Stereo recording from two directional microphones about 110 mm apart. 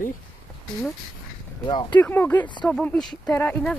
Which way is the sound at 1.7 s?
45° left (ahead or behind).